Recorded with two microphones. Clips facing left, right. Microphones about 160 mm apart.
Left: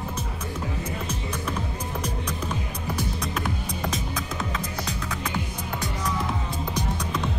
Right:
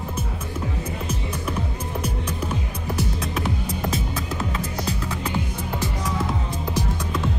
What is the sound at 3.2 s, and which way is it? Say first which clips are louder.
Music: right 3 dB; 5° right (ahead or behind).